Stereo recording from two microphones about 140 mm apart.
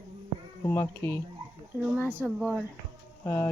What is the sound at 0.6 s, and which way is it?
Speech, 20° left (ahead or behind).